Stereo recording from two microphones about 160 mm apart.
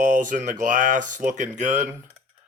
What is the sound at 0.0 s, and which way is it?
Speech, 55° right (ahead or behind).